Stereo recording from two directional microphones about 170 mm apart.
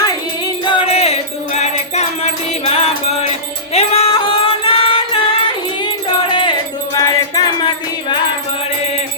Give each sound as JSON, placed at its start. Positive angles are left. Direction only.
{"t": 0.0, "sound": "music", "side_deg": 20}